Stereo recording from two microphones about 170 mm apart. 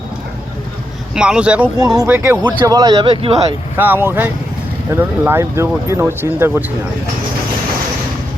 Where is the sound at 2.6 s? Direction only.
25° right (ahead or behind).